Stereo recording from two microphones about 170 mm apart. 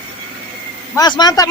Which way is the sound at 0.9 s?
25° left (ahead or behind).